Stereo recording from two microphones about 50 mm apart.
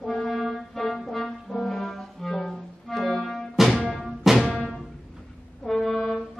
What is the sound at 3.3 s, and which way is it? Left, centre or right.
Music, centre.